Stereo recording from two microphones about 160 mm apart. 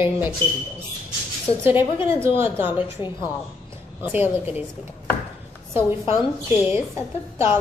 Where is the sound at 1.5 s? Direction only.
35° left (ahead or behind).